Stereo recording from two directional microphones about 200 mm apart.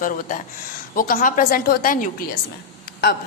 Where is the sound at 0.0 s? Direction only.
40° left (ahead or behind).